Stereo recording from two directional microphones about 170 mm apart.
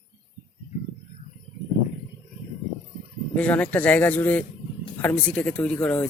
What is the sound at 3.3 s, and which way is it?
Speech, 10° left (ahead or behind).